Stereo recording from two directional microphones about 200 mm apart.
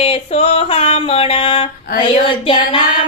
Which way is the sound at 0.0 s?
30° left (ahead or behind).